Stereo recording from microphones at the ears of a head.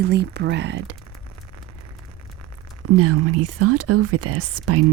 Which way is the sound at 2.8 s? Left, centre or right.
Right.